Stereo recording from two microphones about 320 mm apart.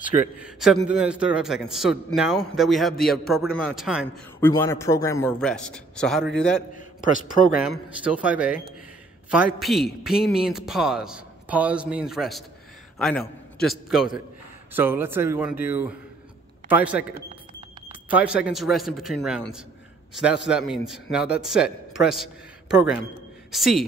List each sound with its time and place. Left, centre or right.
0.0 s a man's voice: left
0.4 s a man's voice: centre
6.7 s a man's voice: left
8.0 s a man's voice: centre